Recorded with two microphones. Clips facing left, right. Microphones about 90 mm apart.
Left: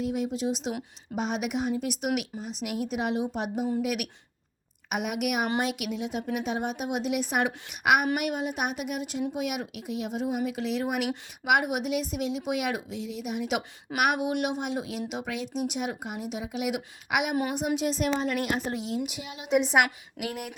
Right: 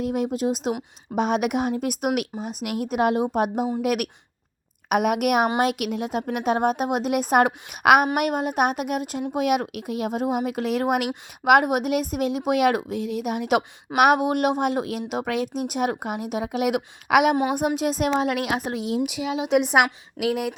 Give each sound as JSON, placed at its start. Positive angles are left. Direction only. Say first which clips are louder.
{"t": 0.0, "sound": "a woman's voice", "louder": "right 5 dB", "side_deg": -50}
{"t": 1.1, "sound": "a woman's voice", "louder": "right 7 dB", "side_deg": -60}
{"t": 17.7, "sound": "a woman's voice", "louder": "right 4 dB", "side_deg": -45}